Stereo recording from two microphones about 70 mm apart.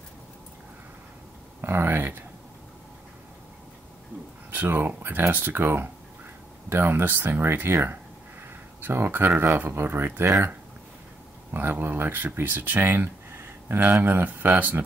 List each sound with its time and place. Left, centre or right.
1.6 s speech: right
4.5 s speech: right
11.5 s speech: right